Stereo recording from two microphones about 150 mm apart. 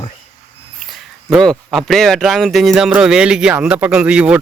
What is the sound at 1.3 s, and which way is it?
Speech, centre (ahead or behind).